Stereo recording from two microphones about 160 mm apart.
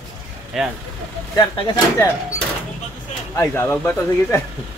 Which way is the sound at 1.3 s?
30° left (ahead or behind).